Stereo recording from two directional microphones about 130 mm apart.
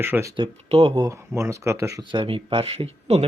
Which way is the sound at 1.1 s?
20° right (ahead or behind).